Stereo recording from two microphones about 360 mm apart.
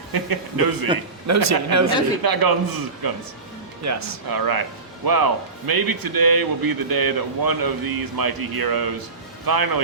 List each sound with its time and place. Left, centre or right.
0.1 s speech: right
1.3 s a man's voice: right
2.2 s speech: right
3.8 s a man's voice: right
4.3 s speech: right